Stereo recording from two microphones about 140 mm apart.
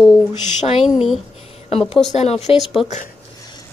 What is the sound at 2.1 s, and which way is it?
Speech, 50° left (ahead or behind).